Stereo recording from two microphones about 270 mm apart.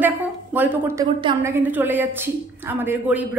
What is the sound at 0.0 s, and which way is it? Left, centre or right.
A woman's voice, centre.